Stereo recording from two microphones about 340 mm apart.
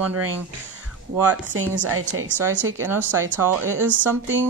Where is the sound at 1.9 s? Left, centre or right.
Right.